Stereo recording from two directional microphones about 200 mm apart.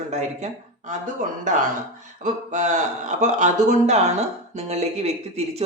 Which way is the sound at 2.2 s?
35° right (ahead or behind).